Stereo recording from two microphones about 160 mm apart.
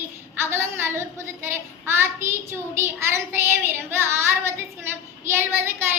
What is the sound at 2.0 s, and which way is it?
Child singing, 15° right (ahead or behind).